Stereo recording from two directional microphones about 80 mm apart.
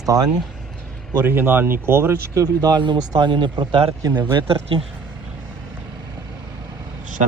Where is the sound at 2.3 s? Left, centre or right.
Right.